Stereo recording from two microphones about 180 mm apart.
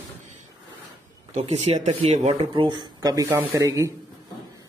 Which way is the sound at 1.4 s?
35° right (ahead or behind).